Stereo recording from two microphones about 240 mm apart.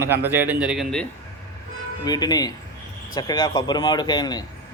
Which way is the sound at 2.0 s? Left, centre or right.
Centre.